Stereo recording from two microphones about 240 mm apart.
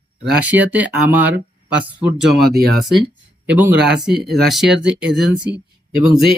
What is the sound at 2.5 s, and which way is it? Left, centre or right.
Speech, right.